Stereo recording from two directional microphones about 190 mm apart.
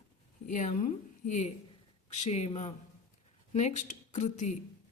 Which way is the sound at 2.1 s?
35° left (ahead or behind).